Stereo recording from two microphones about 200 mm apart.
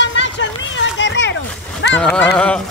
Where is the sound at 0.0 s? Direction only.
65° left (ahead or behind).